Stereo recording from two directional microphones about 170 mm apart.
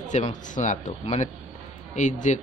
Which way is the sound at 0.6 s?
45° left (ahead or behind).